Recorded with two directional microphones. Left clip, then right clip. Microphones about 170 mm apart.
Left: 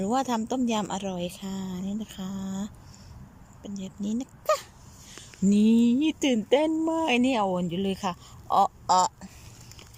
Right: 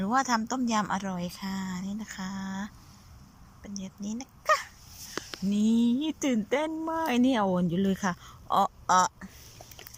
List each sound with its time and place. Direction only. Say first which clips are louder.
0.0 s speech: even; 15° left (ahead or behind)